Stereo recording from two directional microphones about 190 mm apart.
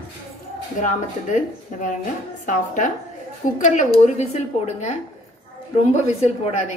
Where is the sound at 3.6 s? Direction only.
40° left (ahead or behind).